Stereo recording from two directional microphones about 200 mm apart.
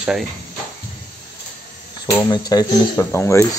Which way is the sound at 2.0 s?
20° left (ahead or behind).